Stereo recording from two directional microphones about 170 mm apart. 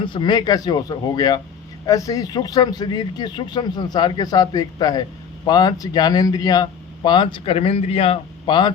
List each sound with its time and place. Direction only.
0.0 s speech: 25° left (ahead or behind)